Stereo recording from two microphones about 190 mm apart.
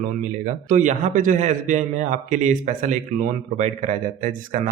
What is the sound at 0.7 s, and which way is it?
A man's voice, 40° right (ahead or behind).